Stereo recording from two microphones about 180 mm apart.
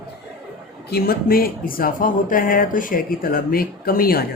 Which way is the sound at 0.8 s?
60° left (ahead or behind).